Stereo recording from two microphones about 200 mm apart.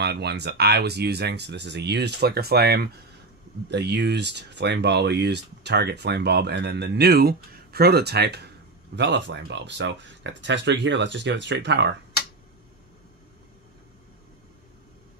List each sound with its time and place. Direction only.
0.0 s speech: 55° right (ahead or behind)